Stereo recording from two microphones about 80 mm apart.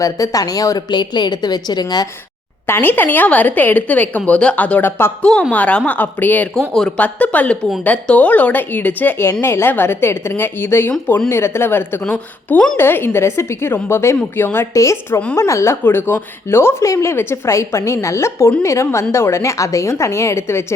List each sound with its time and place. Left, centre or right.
0.0 s speech: left
0.9 s a woman's voice: left
2.6 s a woman's voice: left
5.2 s a woman's voice: centre
6.7 s a woman's voice: centre; by 14.7 s left
14.7 s a woman's voice: left